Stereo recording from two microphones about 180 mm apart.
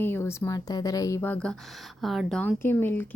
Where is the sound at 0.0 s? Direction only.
15° left (ahead or behind).